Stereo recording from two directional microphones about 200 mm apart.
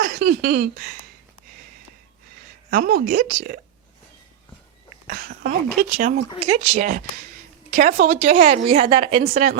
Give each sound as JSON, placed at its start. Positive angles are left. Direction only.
{"t": 0.0, "sound": "a sound", "side_deg": -45}
{"t": 2.6, "sound": "a woman's voice", "side_deg": -50}
{"t": 5.0, "sound": "a woman's voice", "side_deg": -45}
{"t": 8.9, "sound": "a woman's voice", "side_deg": -25}
{"t": 9.2, "sound": "a woman's voice", "side_deg": -35}